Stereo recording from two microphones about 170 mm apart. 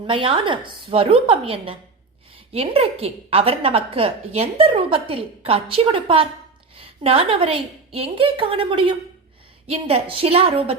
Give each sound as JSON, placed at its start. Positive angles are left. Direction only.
{"t": 0.1, "sound": "a woman's voice", "side_deg": -30}